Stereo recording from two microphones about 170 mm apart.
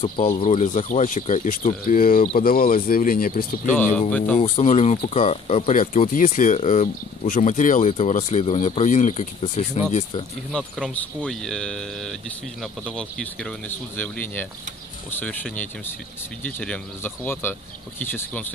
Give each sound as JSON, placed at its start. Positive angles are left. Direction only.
{"t": 0.0, "sound": "speech", "side_deg": 50}
{"t": 4.4, "sound": "speech", "side_deg": 40}
{"t": 10.5, "sound": "speech", "side_deg": 5}